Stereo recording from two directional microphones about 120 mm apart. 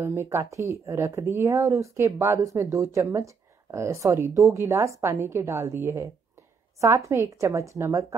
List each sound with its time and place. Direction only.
0.0 s speech: 20° right (ahead or behind)